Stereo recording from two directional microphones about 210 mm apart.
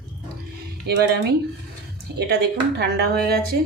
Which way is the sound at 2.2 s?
50° right (ahead or behind).